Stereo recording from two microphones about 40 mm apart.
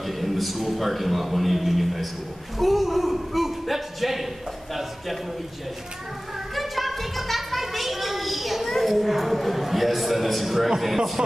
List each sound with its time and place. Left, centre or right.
0.0 s a man's voice: centre
6.5 s a sound: centre
11.2 s speech: centre